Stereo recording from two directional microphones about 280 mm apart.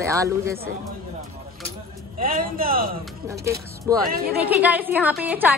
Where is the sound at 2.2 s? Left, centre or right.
Right.